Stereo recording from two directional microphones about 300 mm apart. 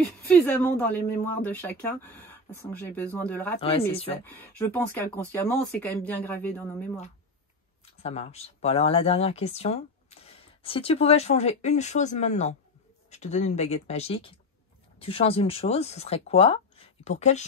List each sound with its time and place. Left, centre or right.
0.3 s speech: centre
8.0 s speech: left